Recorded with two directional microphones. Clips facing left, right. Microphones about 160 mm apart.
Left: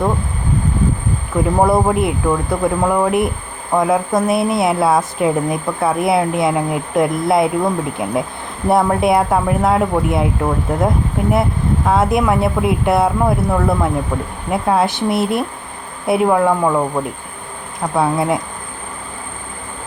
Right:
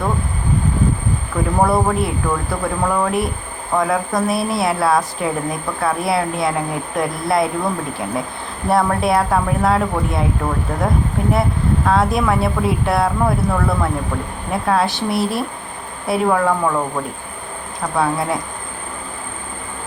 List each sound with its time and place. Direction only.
1.5 s speech: 20° left (ahead or behind)
11.9 s speech: 20° left (ahead or behind)
17.9 s speech: 20° left (ahead or behind)